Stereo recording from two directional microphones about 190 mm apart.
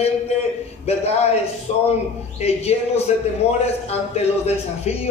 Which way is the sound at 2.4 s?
35° left (ahead or behind).